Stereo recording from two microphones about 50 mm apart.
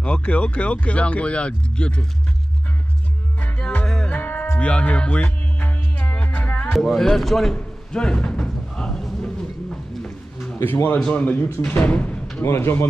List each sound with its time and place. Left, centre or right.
0.0 s speech: left
3.3 s music: left
3.8 s music: centre
4.1 s music: left
6.7 s speech: centre
7.5 s speech: centre
8.7 s music: centre
9.2 s a sound: centre
10.6 s speech: left
11.0 s speech: centre
11.6 s speech: left
12.4 s speech: left